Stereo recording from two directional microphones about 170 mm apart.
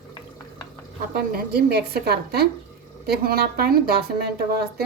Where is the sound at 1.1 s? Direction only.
65° right (ahead or behind).